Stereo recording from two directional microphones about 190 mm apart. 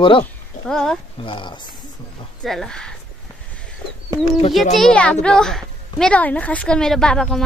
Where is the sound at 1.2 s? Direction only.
25° left (ahead or behind).